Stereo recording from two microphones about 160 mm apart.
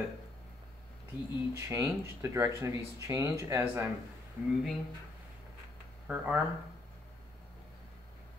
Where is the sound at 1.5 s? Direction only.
15° right (ahead or behind).